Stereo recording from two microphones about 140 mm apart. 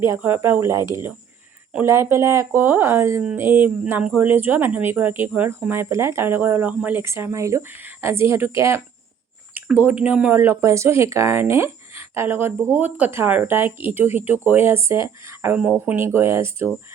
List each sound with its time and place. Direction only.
0.0 s speech: 15° right (ahead or behind)